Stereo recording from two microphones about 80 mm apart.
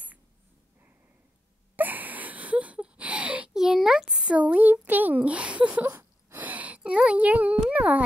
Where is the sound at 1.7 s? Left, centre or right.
Right; by 4.3 s centre.